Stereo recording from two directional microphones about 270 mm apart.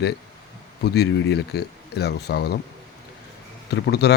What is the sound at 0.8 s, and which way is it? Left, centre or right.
Speech, left.